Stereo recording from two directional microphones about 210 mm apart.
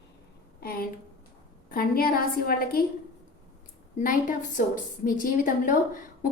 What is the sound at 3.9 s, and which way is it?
A woman's voice, 40° left (ahead or behind).